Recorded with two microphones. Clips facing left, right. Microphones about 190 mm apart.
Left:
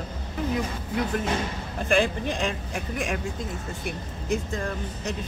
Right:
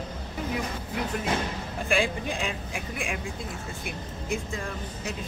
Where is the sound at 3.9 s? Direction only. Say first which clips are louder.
Left 4 dB; 40° left (ahead or behind).